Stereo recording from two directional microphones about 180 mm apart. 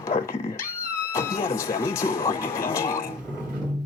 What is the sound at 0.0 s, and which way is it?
Dog, 15° left (ahead or behind).